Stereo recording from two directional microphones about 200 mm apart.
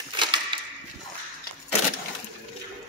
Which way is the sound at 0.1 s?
25° right (ahead or behind).